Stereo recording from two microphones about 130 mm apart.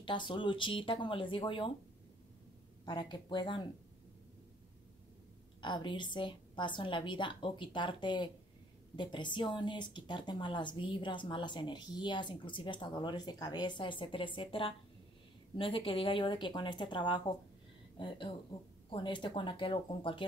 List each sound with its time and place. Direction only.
0.0 s speech: 35° left (ahead or behind)
2.8 s speech: 35° left (ahead or behind)
5.6 s speech: 35° left (ahead or behind)